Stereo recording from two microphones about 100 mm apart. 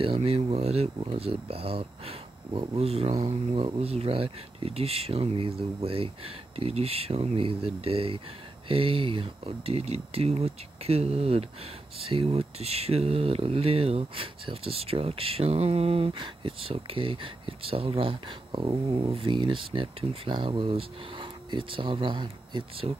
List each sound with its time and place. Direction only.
0.0 s speech: 75° right (ahead or behind)
1.1 s speech: 75° right (ahead or behind)
3.3 s speech: 70° right (ahead or behind); by 11.4 s 90° right
12.1 s speech: 75° right (ahead or behind); by 22.8 s 50° right (ahead or behind)